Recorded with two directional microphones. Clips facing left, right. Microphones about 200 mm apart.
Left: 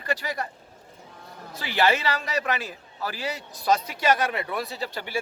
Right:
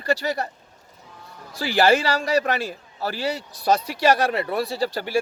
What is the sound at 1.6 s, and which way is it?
Speech, 40° right (ahead or behind).